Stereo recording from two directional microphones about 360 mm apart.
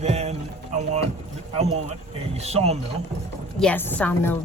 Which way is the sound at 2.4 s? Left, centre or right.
Centre.